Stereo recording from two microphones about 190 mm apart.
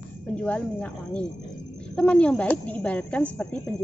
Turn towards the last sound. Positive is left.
turn(degrees=5)  # may be behind; listen again after turning